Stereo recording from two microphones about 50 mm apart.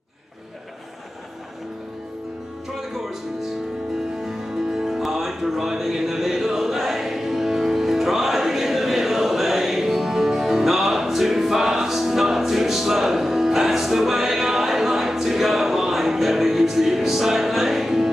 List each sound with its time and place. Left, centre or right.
4.3 s music: centre